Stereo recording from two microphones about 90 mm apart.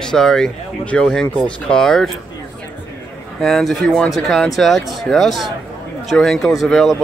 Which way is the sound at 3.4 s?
Centre (ahead or behind).